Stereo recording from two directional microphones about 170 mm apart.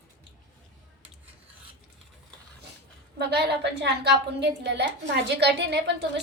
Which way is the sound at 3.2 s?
75° right (ahead or behind).